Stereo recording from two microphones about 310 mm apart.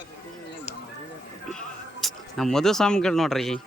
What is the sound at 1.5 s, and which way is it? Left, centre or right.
Speech, centre.